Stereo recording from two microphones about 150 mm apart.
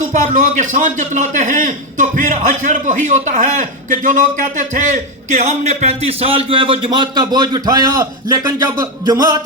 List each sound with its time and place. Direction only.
0.1 s a man's voice: 55° right (ahead or behind); by 9.4 s 25° right (ahead or behind)